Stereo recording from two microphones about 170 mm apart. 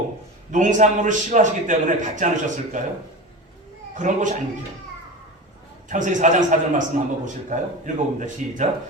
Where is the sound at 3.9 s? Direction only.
45° right (ahead or behind).